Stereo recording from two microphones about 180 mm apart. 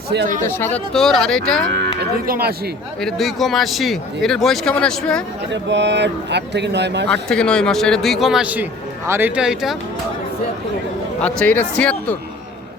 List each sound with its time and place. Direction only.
0.4 s a man's voice: 10° left (ahead or behind)
2.0 s moo: 55° right (ahead or behind)
3.0 s a man's voice: centre (ahead or behind)
5.6 s a man's voice: 80° right
7.1 s a man's voice: 5° left (ahead or behind)
11.2 s speech: 5° left (ahead or behind)